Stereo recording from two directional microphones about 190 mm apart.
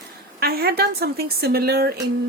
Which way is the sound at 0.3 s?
55° right (ahead or behind).